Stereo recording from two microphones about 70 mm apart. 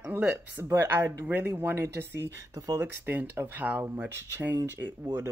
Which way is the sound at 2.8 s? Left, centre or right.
Right.